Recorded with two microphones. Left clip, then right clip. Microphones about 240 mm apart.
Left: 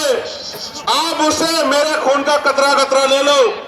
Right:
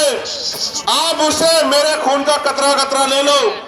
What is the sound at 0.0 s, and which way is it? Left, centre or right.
A man's voice, right.